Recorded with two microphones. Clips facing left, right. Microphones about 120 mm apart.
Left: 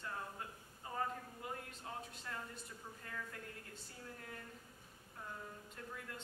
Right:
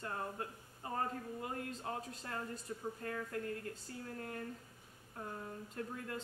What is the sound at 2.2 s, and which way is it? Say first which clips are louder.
Speech: right 5 dB; 45° right (ahead or behind).